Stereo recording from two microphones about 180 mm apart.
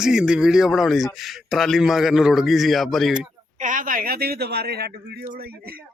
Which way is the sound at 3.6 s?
45° right (ahead or behind).